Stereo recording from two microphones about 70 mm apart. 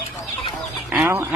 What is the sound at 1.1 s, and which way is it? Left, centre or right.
Duck, right.